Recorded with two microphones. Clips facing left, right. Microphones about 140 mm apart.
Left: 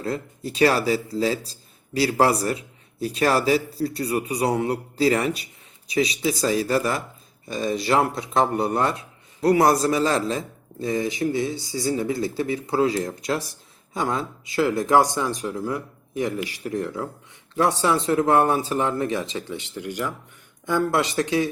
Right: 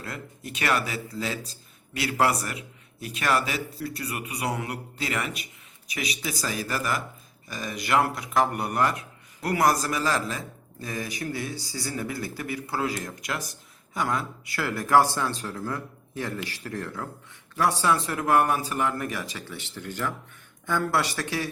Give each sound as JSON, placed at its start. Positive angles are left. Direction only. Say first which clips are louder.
{"t": 0.0, "sound": "a man's voice", "louder": "left 9 dB", "side_deg": 30}